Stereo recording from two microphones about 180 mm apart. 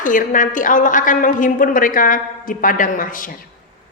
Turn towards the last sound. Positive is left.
turn(degrees=50)  # may be behind; listen again after turning